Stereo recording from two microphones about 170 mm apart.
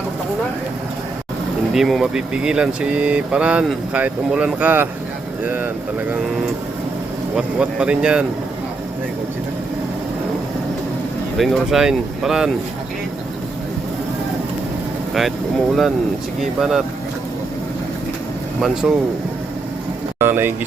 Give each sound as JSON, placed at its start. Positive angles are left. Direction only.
{"t": 1.7, "sound": "speech", "side_deg": 0}
{"t": 7.3, "sound": "speech", "side_deg": -5}
{"t": 11.3, "sound": "speech", "side_deg": 0}
{"t": 15.1, "sound": "speech", "side_deg": 0}
{"t": 18.6, "sound": "speech", "side_deg": -5}
{"t": 20.1, "sound": "vehicle", "side_deg": -15}